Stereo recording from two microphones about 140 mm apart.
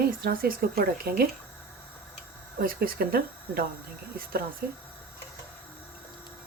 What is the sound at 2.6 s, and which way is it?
Speech, 90° right.